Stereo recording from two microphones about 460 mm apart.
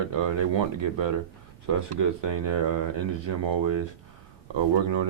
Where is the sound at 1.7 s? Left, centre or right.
Right.